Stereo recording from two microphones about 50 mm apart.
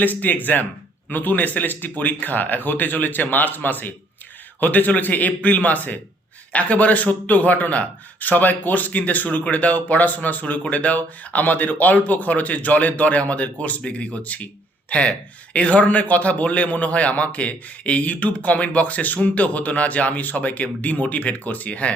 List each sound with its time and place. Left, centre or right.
0.0 s a man's voice: left